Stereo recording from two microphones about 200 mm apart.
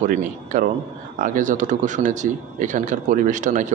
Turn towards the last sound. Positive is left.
turn(degrees=-40)  # may be behind; listen again after turning